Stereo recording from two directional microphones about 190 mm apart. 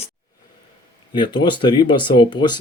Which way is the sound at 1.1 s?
25° left (ahead or behind).